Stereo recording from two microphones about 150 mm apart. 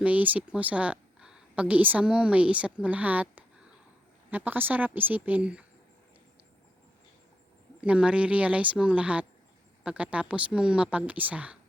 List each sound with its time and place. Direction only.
0.0 s a woman's voice: 10° right (ahead or behind)
7.8 s a woman's voice: 5° right (ahead or behind)